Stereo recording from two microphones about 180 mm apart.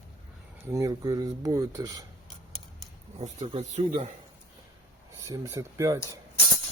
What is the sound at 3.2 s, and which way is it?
Speech, 35° right (ahead or behind).